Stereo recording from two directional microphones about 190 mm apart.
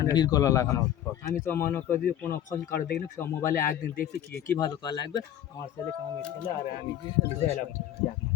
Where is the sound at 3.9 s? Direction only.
55° left (ahead or behind).